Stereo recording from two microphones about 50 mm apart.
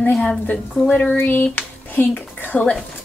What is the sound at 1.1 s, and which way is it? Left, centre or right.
Speech, left.